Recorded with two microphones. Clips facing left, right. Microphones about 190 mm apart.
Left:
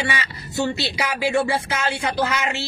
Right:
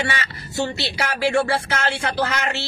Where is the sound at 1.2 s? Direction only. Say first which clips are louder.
Right 1 dB; 15° left (ahead or behind).